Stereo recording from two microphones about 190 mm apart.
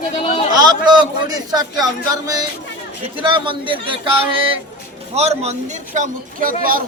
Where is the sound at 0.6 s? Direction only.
20° right (ahead or behind).